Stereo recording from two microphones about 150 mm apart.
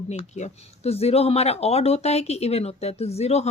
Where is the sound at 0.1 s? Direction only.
50° left (ahead or behind).